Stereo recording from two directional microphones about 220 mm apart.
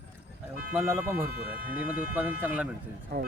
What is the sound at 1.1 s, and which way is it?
Speech, 40° right (ahead or behind).